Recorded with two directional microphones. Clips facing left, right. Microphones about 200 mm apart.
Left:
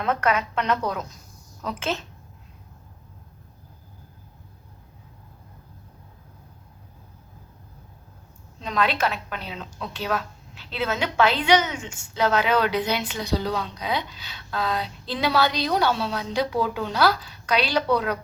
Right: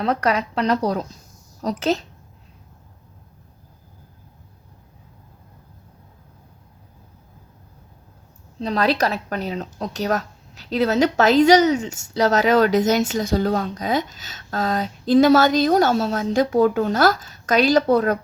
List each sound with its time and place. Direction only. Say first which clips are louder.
0.0 s a woman's voice: right 3 dB; 35° right (ahead or behind)
8.6 s a woman's voice: right 4 dB; 35° right (ahead or behind)